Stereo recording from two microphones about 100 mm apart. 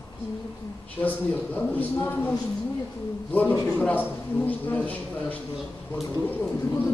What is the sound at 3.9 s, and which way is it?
A man's voice, 15° left (ahead or behind).